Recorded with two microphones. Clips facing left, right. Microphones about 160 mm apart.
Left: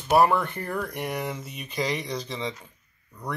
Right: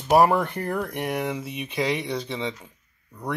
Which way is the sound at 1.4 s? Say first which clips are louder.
Right 3 dB; 5° right (ahead or behind).